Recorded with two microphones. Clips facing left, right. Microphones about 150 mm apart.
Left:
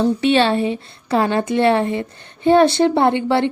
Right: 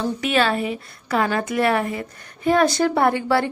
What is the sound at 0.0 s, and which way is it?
A woman's voice, 30° left (ahead or behind).